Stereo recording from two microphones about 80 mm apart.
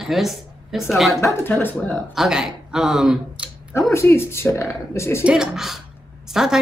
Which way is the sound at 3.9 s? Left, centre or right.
Left.